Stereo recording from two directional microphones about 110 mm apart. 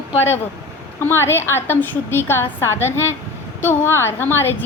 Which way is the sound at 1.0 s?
20° left (ahead or behind).